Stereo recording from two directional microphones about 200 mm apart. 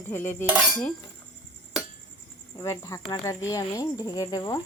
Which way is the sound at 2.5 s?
15° left (ahead or behind).